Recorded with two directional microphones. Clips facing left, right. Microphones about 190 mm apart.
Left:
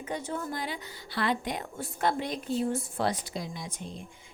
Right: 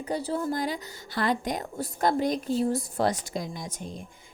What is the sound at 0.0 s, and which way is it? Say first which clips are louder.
A woman's voice: right 5 dB; 35° right (ahead or behind).